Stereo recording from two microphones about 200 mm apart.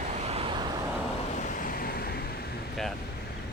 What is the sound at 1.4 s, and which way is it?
Vehicle, 45° left (ahead or behind).